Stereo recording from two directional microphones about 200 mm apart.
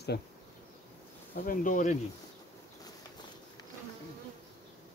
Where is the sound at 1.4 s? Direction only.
45° left (ahead or behind).